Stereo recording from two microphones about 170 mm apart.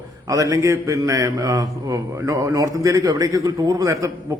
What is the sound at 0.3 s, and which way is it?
A man's voice, 20° right (ahead or behind).